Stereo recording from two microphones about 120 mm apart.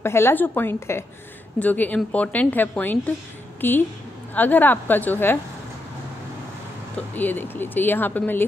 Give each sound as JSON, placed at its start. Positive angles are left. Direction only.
{"t": 0.0, "sound": "a woman's voice", "side_deg": 20}
{"t": 7.2, "sound": "speech", "side_deg": 15}